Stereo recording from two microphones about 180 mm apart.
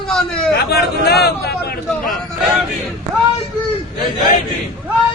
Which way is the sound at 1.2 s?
60° left (ahead or behind).